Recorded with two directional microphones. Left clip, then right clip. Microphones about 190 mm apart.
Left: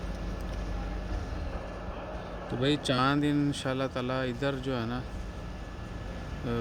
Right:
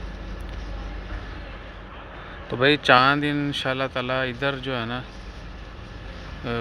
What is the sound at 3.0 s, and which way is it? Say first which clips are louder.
Speech: right 7 dB; 5° right (ahead or behind).